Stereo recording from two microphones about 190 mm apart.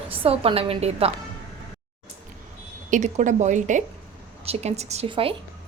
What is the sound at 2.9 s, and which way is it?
A woman's voice, 40° right (ahead or behind).